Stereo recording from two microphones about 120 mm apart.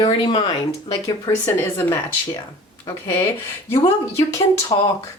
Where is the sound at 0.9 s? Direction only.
35° left (ahead or behind).